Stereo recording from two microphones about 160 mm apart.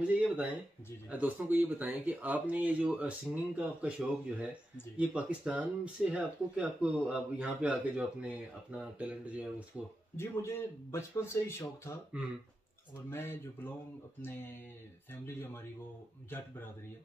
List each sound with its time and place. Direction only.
0.0 s a sound: 10° right (ahead or behind)
1.1 s speech: 10° right (ahead or behind)
4.9 s speech: 5° right (ahead or behind)
10.1 s a man's voice: 15° left (ahead or behind)
13.1 s a man's voice: 15° left (ahead or behind)
15.2 s a man's voice: 15° left (ahead or behind)